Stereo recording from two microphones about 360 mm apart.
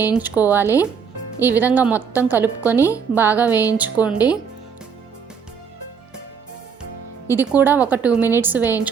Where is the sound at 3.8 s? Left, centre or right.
Centre.